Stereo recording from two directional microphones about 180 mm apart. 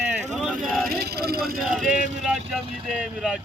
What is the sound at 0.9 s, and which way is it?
Speech, 60° right (ahead or behind).